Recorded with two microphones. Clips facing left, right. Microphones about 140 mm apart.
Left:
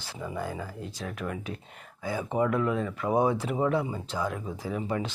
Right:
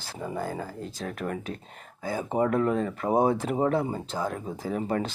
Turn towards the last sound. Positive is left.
turn(degrees=-45)  # may be behind; listen again after turning